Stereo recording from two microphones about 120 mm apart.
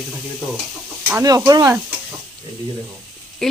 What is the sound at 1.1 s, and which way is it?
Stir, 25° right (ahead or behind).